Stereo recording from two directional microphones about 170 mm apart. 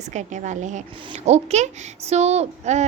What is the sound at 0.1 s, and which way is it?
A woman's voice, 45° right (ahead or behind).